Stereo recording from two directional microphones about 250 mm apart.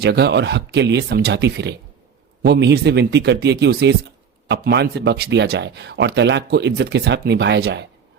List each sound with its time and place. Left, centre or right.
0.0 s speech: right